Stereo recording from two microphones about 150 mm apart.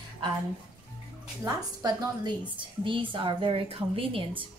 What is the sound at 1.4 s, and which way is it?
A woman's voice, 25° right (ahead or behind).